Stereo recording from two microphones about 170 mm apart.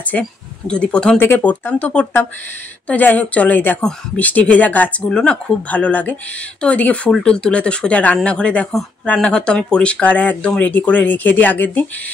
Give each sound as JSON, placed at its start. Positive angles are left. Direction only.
{"t": 0.0, "sound": "speech", "side_deg": 5}